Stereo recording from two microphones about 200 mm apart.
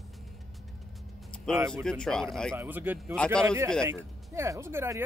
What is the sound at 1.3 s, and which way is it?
Music, 5° left (ahead or behind).